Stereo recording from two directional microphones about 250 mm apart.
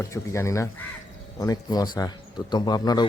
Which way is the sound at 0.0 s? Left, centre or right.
Centre.